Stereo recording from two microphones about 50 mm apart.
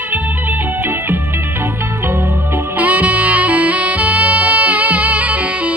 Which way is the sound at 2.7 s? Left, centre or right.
Right.